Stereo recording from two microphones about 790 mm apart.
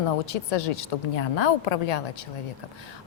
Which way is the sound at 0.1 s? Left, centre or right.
Left.